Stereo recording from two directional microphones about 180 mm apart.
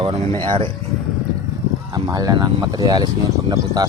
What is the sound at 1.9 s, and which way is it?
Speech, 20° right (ahead or behind).